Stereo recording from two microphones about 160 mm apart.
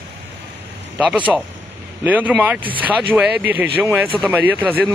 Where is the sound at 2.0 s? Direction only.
10° right (ahead or behind).